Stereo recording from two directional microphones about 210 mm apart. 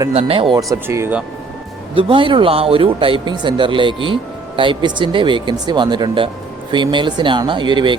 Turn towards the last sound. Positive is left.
turn(degrees=-20)  # may be behind; listen again after turning